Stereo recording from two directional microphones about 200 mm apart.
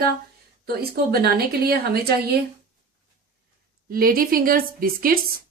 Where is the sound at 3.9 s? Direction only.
45° right (ahead or behind).